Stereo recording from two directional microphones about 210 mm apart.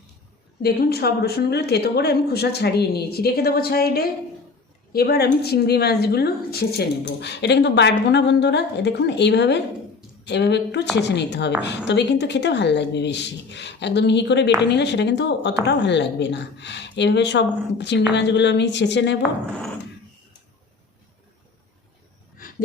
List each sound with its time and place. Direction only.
0.6 s a woman's voice: 50° left (ahead or behind)
19.2 s speech: 5° left (ahead or behind)